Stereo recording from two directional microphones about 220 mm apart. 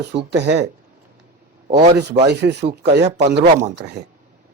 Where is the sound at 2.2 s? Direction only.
50° right (ahead or behind).